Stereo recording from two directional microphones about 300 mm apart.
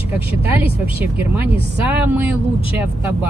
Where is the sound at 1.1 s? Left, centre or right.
Centre.